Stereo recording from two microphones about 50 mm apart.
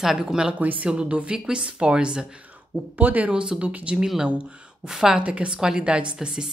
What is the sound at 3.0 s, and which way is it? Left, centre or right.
Speech, right.